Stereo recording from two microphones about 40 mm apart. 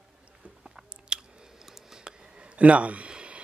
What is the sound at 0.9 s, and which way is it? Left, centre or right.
Chewing, right.